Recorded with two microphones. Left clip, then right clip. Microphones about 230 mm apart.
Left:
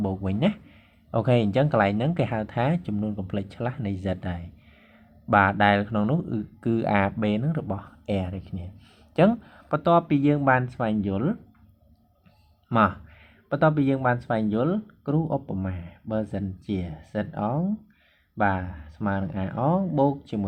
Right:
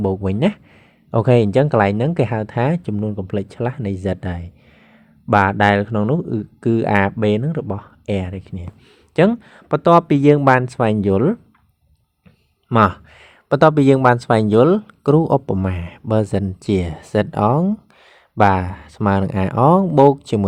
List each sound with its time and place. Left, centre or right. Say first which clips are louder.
0.0 s speech: right 8 dB; right
12.6 s speech: right 7 dB; right